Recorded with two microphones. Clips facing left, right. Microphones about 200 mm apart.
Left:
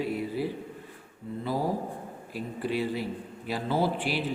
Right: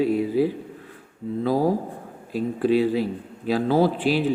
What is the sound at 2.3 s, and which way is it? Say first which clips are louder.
Speech: right 11 dB; 90° right.